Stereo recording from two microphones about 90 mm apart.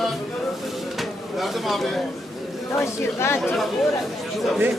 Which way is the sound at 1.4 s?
Centre (ahead or behind).